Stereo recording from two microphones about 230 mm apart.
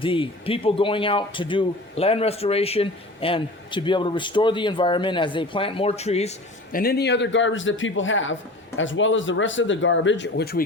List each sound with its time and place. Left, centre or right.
0.0 s speech: left
6.7 s speech: left